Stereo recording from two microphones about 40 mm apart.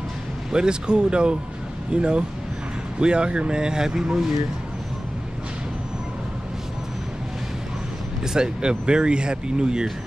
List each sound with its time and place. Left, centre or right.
0.5 s speech: right
8.2 s speech: centre